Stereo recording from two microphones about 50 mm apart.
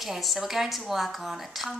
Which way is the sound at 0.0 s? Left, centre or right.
Centre.